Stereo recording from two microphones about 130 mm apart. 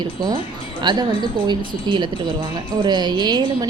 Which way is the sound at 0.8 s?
35° right (ahead or behind).